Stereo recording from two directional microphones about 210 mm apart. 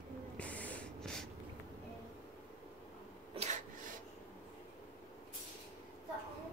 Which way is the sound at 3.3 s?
35° right (ahead or behind).